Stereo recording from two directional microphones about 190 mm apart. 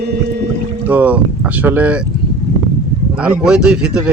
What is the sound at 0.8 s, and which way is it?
Speech, 10° right (ahead or behind).